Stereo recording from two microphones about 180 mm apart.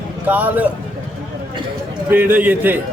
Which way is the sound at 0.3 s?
10° right (ahead or behind).